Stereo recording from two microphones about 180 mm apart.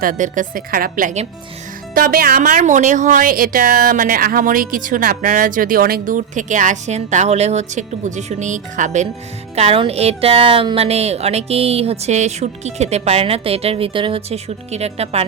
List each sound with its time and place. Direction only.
0.0 s speech: 45° right (ahead or behind)
2.0 s speech: 55° right (ahead or behind); by 15.2 s 35° right (ahead or behind)